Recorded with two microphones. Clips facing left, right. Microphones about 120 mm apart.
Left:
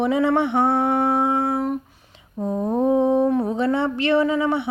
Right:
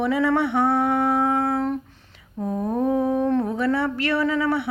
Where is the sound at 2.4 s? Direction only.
20° left (ahead or behind).